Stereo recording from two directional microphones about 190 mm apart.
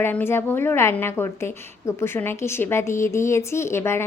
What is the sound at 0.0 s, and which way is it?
A woman's voice, 10° left (ahead or behind).